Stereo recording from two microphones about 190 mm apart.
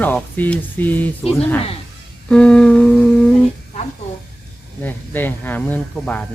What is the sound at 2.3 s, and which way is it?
Humming, 5° left (ahead or behind).